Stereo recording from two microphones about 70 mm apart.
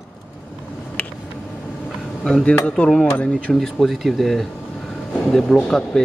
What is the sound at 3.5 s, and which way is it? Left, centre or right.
Speech, centre.